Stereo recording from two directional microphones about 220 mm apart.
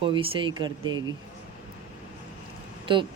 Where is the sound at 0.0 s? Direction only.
25° right (ahead or behind).